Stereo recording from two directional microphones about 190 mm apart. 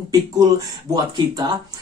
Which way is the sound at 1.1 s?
20° right (ahead or behind).